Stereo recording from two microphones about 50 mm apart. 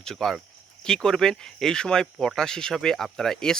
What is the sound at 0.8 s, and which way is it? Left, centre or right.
Speech, centre.